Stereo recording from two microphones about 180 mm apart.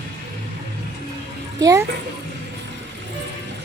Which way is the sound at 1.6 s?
20° right (ahead or behind).